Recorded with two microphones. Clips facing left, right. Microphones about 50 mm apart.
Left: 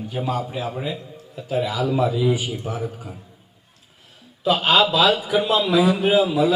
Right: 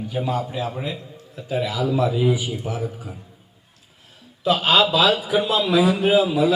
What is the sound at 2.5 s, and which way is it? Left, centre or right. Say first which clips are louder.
Speech: even; centre.